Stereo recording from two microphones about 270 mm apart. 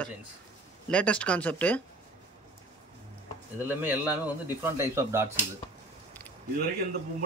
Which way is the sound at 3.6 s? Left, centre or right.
Centre.